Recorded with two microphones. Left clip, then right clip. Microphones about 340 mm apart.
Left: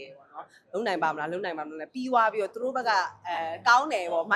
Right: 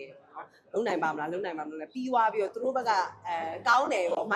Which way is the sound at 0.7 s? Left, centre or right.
Centre.